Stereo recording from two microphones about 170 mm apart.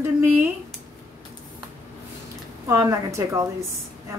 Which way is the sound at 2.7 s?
15° right (ahead or behind).